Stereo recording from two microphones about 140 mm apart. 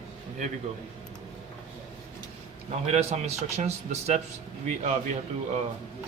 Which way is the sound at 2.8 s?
50° right (ahead or behind).